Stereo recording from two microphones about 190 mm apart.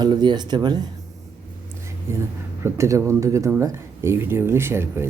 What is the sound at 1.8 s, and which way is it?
Speech, 15° right (ahead or behind).